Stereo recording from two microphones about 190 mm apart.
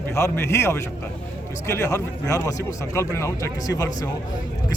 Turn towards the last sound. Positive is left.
turn(degrees=20)  # may be behind; listen again after turning